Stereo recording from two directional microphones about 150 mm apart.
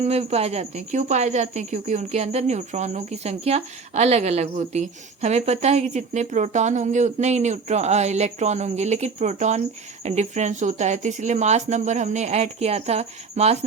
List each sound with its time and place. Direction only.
0.0 s speech: 45° right (ahead or behind)